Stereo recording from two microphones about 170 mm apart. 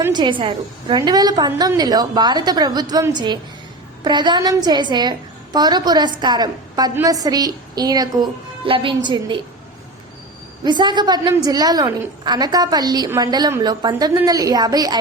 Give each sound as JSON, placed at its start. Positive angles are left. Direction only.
{"t": 0.1, "sound": "a woman's voice", "side_deg": -25}
{"t": 10.6, "sound": "a woman's voice", "side_deg": -25}